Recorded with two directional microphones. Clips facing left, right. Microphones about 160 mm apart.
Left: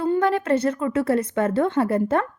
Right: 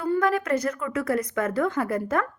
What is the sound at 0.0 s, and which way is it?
A woman's voice, 30° left (ahead or behind).